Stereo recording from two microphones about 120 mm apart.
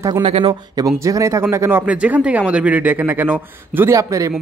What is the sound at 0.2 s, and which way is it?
Speech, 55° right (ahead or behind).